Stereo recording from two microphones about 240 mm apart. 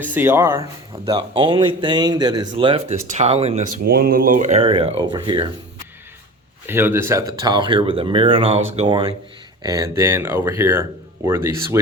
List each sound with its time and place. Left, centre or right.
0.0 s speech: centre; by 3.8 s right
3.8 s speech: right
6.7 s speech: centre